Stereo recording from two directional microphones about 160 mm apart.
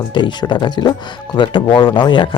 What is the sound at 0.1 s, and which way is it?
Speech, 30° left (ahead or behind).